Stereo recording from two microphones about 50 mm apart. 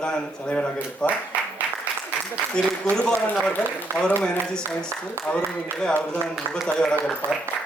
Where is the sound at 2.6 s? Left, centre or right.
Centre.